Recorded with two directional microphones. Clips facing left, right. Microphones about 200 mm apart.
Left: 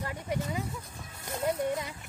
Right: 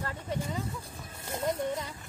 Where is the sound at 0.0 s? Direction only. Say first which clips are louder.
Left 1 dB; 10° left (ahead or behind).